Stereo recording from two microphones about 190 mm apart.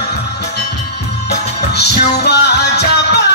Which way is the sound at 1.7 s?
60° left (ahead or behind).